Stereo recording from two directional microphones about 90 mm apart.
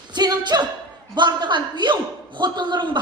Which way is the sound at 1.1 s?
60° right (ahead or behind).